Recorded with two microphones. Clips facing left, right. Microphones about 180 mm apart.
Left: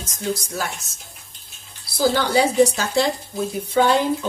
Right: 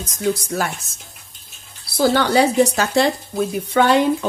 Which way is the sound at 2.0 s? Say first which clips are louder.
Right 3 dB; 65° right (ahead or behind).